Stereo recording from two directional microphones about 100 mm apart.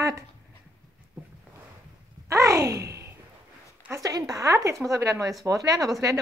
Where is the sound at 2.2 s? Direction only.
30° right (ahead or behind).